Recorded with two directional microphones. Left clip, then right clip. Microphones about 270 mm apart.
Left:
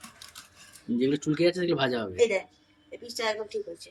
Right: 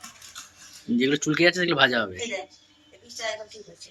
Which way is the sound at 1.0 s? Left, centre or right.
Centre.